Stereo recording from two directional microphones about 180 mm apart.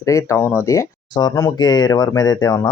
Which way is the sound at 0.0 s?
15° left (ahead or behind).